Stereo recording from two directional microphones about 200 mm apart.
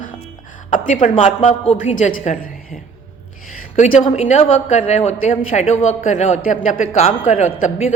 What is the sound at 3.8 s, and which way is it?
A man's voice, 40° left (ahead or behind).